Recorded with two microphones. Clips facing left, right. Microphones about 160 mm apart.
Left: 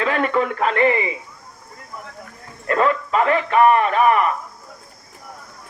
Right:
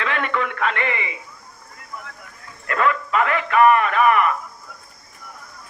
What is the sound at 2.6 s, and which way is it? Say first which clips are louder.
A man's voice: left 3 dB; 30° left (ahead or behind).